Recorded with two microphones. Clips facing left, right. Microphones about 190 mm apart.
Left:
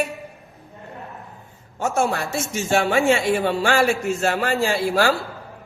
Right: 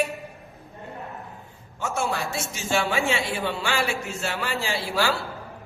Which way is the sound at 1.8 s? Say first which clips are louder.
Left 5 dB; 45° left (ahead or behind).